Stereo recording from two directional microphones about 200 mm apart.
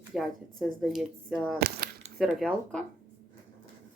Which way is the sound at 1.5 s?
50° right (ahead or behind).